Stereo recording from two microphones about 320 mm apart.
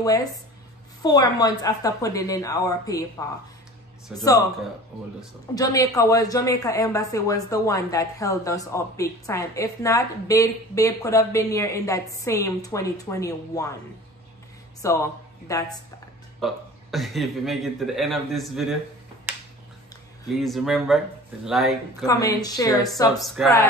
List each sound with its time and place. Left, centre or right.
0.0 s a woman's voice: centre
4.1 s a woman's voice: centre
5.5 s a woman's voice: centre
14.8 s a man's voice: centre
20.3 s a man's voice: centre
22.0 s a woman's voice: centre
23.1 s a man's voice: centre